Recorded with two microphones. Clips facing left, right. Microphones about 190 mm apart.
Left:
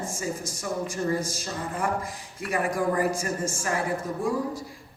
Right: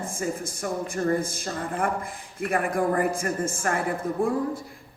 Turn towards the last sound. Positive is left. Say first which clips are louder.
# right 2 dB
turn(degrees=-55)  # may be behind; listen again after turning